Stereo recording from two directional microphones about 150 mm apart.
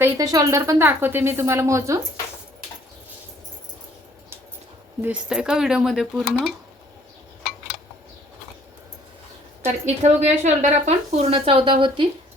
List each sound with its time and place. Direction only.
0.0 s a woman's voice: 25° right (ahead or behind)
5.0 s speech: 5° right (ahead or behind)
9.6 s speech: 50° right (ahead or behind); by 12.0 s 35° right (ahead or behind)